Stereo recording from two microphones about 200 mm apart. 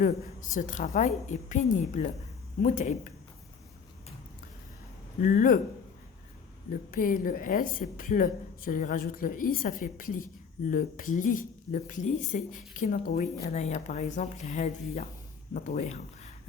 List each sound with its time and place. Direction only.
0.0 s speech: 40° left (ahead or behind)
5.2 s a woman's voice: 45° left (ahead or behind)
6.7 s a woman's voice: 45° left (ahead or behind)